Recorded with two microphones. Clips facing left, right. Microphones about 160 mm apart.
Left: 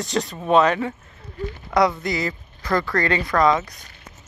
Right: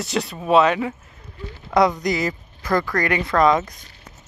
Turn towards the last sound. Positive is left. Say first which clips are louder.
# right 1 dB
turn(degrees=-20)  # may be behind; listen again after turning